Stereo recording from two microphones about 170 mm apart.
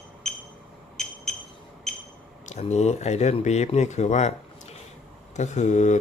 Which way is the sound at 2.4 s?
40° left (ahead or behind).